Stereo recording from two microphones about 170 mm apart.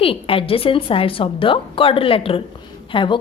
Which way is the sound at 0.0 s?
35° left (ahead or behind).